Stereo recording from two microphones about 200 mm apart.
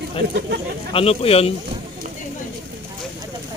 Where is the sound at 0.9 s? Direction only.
30° left (ahead or behind).